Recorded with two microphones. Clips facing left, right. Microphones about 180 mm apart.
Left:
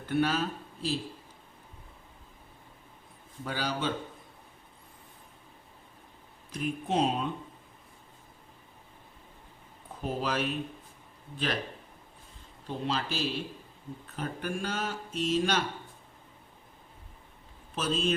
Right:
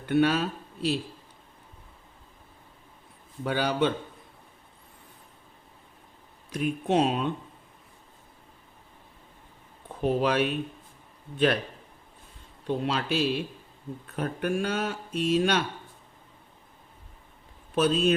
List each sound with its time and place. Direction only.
0.0 s speech: 65° right (ahead or behind)
3.4 s speech: 60° right (ahead or behind)
6.5 s speech: 70° right (ahead or behind)
10.0 s speech: 65° right (ahead or behind)
12.6 s speech: 65° right (ahead or behind)
17.7 s speech: 65° right (ahead or behind)